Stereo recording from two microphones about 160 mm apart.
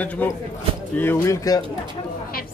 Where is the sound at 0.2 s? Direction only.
10° left (ahead or behind).